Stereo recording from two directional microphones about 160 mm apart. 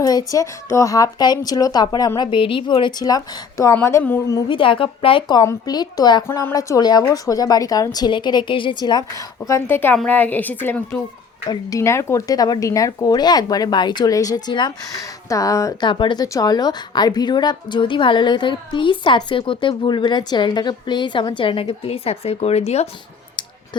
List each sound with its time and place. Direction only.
0.0 s a woman's voice: 25° left (ahead or behind)
4.4 s a woman's voice: 30° left (ahead or behind)